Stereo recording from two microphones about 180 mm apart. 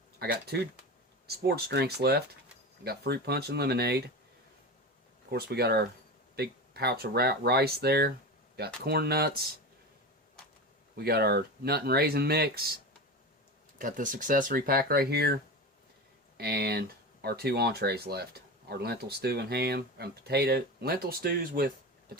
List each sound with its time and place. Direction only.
0.2 s speech: 65° right (ahead or behind)
5.3 s speech: 60° right (ahead or behind)
10.9 s speech: 60° right (ahead or behind)
13.7 s speech: 45° right (ahead or behind)
16.4 s speech: 60° right (ahead or behind)